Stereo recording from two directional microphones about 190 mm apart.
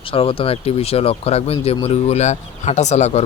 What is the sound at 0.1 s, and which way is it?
Speech, 30° left (ahead or behind).